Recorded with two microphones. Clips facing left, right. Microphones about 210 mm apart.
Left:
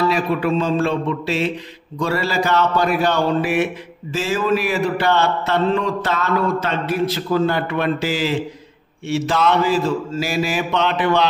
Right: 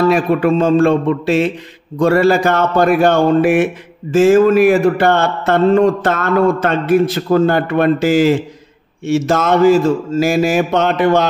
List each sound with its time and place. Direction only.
0.1 s a man's voice: 50° right (ahead or behind)